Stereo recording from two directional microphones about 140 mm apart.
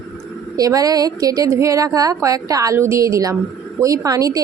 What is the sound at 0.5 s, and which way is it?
A woman's voice, 25° right (ahead or behind).